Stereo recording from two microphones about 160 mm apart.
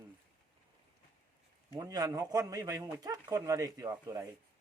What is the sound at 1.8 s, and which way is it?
Speech, 20° right (ahead or behind).